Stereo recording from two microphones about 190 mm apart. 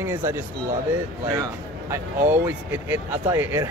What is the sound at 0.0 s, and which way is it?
Speech, 10° right (ahead or behind).